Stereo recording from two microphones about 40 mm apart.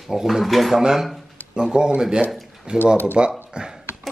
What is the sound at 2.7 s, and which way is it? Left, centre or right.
Speech, left.